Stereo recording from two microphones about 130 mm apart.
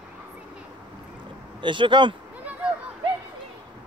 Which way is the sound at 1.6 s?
40° right (ahead or behind).